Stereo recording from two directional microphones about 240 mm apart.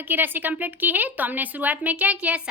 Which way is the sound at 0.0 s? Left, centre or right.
Centre.